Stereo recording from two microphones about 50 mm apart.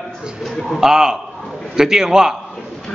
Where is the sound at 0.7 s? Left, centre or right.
Centre.